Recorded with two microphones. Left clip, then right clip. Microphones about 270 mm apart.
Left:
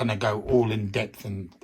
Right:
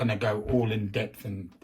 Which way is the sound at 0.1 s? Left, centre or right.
Left.